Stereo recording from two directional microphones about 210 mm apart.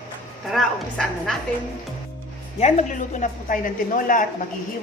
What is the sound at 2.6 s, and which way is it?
A woman's voice, 35° left (ahead or behind).